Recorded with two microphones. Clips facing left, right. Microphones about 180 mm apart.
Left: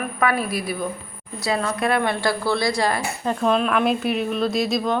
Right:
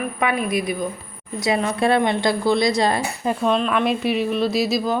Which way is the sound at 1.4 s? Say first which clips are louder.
Right 3 dB; 20° right (ahead or behind).